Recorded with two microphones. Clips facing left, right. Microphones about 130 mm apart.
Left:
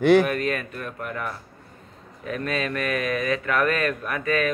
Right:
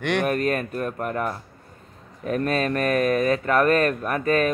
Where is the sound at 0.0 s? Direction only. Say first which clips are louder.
Left 7 dB; 5° left (ahead or behind).